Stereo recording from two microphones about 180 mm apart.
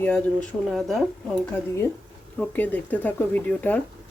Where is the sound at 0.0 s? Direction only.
10° left (ahead or behind).